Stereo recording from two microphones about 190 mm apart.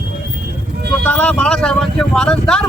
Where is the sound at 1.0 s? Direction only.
5° left (ahead or behind).